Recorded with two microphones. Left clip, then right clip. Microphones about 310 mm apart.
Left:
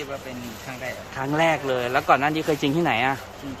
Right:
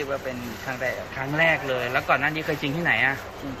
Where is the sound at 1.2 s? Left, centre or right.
Left.